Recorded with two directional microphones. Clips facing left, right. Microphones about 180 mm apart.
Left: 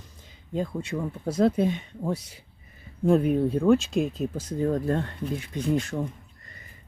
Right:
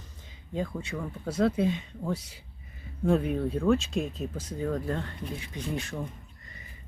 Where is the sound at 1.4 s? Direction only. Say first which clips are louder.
Left 3 dB; 40° left (ahead or behind).